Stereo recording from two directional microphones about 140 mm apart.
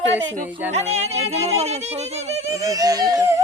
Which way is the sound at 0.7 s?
50° right (ahead or behind).